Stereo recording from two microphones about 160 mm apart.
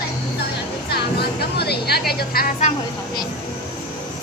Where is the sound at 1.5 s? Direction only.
85° left.